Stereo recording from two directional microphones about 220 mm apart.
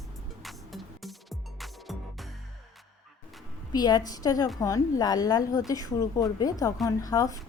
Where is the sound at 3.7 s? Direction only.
20° left (ahead or behind).